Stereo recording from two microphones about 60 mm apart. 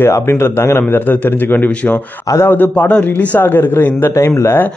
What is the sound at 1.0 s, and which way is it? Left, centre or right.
A man's voice, left.